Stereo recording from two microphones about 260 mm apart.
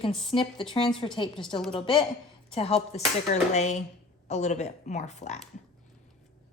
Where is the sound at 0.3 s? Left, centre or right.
Centre.